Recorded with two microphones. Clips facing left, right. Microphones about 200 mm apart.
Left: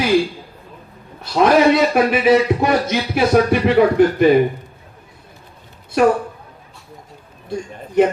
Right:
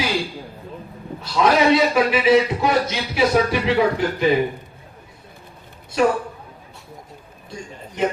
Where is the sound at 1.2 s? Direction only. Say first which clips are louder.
Left 4 dB; 55° left (ahead or behind).